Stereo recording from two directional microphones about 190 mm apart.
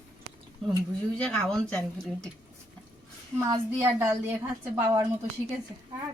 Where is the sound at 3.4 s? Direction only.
15° right (ahead or behind).